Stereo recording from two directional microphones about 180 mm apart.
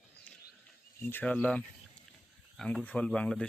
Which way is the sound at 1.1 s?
10° left (ahead or behind).